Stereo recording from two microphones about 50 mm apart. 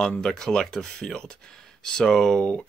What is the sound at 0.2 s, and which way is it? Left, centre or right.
Speech, centre.